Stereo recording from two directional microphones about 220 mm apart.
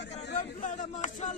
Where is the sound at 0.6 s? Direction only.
35° left (ahead or behind).